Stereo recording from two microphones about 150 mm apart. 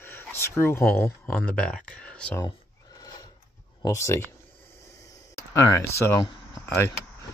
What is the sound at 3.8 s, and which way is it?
Speech, 20° left (ahead or behind).